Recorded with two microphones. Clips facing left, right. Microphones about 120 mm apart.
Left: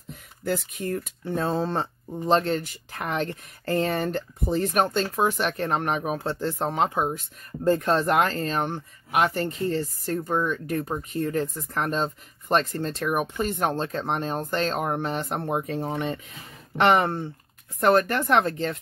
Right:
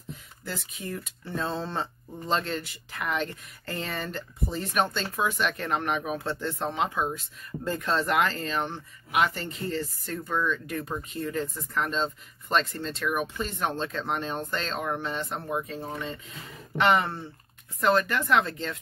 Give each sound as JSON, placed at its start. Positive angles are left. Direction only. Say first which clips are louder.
{"t": 0.7, "sound": "speech", "louder": "left 7 dB", "side_deg": 50}
{"t": 16.7, "sound": "speech", "louder": "left 3 dB", "side_deg": 55}